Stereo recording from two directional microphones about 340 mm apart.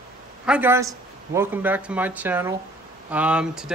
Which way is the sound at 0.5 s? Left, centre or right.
Centre.